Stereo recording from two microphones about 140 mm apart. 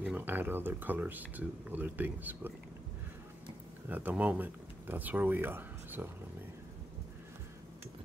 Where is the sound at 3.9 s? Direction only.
10° right (ahead or behind).